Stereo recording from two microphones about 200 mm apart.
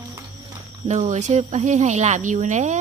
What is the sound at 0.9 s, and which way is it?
Speech, 35° right (ahead or behind).